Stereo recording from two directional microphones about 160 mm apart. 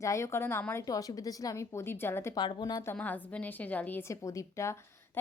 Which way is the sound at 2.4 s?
25° left (ahead or behind).